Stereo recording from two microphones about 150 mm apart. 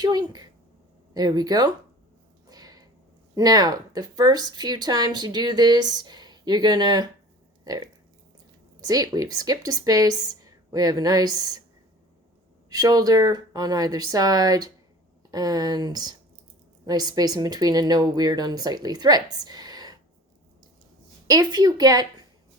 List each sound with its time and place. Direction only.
0.0 s speech: 25° right (ahead or behind)
2.5 s a sound: 25° right (ahead or behind)
3.3 s speech: 25° right (ahead or behind)
12.7 s speech: 25° right (ahead or behind)
21.2 s speech: 25° right (ahead or behind)